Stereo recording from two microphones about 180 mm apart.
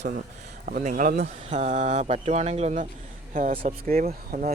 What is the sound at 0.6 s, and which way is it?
Speech, 50° right (ahead or behind).